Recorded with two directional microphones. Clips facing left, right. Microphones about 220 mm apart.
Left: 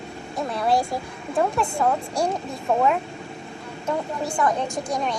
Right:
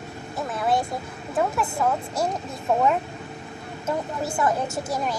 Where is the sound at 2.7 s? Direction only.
Centre (ahead or behind).